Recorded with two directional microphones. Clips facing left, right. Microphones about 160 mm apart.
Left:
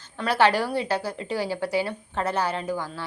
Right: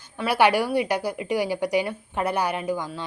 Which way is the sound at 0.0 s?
10° right (ahead or behind).